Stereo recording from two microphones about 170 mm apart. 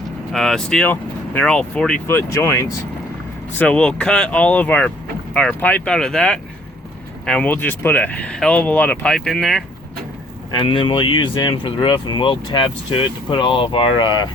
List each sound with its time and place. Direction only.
0.3 s speech: centre (ahead or behind)
10.5 s speech: 30° left (ahead or behind)